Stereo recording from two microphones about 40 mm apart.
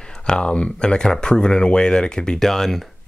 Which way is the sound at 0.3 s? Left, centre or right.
Left.